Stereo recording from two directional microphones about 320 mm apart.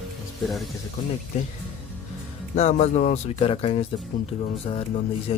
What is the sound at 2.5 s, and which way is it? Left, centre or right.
Speech, left.